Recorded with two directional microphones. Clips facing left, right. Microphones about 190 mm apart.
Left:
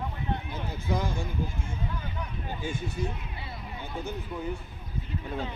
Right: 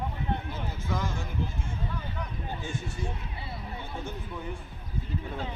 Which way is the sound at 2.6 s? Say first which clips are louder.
Left 5 dB; 10° left (ahead or behind).